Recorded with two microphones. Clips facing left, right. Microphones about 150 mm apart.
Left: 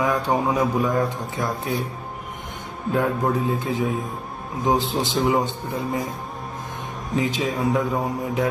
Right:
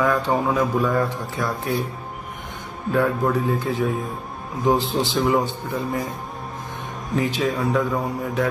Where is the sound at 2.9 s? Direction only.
20° left (ahead or behind).